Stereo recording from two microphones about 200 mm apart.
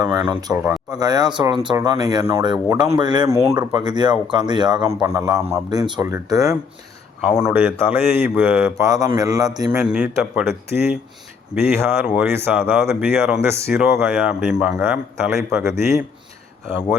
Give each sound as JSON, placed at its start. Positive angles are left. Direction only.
{"t": 0.0, "sound": "speech", "side_deg": -20}
{"t": 0.5, "sound": "speech", "side_deg": -5}
{"t": 0.9, "sound": "speech", "side_deg": -20}
{"t": 7.3, "sound": "speech", "side_deg": -5}